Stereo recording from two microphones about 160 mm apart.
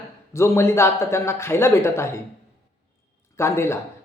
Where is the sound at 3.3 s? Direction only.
15° left (ahead or behind).